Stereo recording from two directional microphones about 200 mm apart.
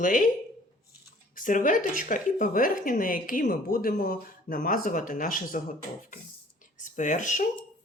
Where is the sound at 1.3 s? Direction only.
40° left (ahead or behind).